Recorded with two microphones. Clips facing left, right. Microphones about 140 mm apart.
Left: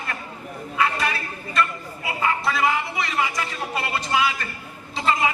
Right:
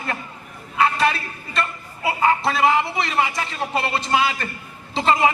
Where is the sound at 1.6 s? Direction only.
25° right (ahead or behind).